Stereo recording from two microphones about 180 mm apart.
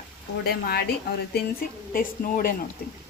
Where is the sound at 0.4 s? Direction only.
60° left (ahead or behind).